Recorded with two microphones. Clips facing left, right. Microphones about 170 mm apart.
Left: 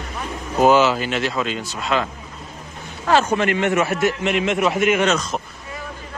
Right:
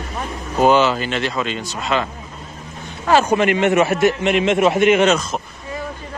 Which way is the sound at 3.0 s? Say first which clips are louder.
Right 3 dB; 10° right (ahead or behind).